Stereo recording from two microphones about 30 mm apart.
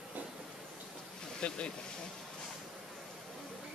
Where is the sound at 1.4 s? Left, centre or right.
Left.